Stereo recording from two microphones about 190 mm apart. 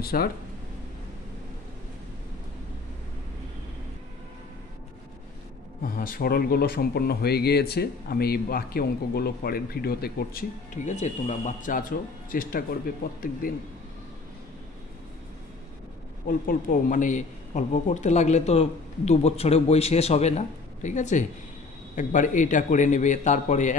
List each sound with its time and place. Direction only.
0.0 s speech: 55° left (ahead or behind)
5.8 s speech: 50° left (ahead or behind)
16.3 s a man's voice: 45° left (ahead or behind)